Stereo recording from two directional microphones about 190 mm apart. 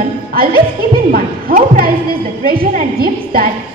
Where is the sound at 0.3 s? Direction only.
50° right (ahead or behind).